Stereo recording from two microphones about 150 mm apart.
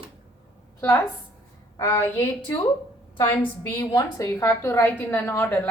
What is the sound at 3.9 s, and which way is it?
A woman's voice, 20° left (ahead or behind).